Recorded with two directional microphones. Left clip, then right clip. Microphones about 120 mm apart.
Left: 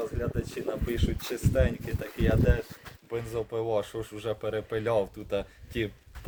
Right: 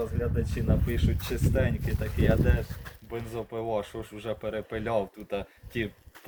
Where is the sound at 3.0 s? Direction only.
45° left (ahead or behind).